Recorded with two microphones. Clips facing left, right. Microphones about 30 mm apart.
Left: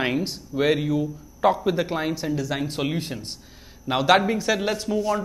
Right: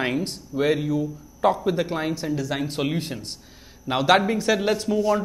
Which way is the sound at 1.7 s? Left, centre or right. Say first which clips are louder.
Even; centre.